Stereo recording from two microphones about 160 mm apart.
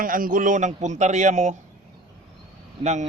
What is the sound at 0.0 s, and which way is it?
A man's voice, 60° right (ahead or behind).